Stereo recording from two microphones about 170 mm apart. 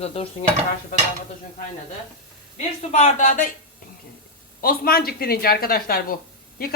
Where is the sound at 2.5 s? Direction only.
45° left (ahead or behind).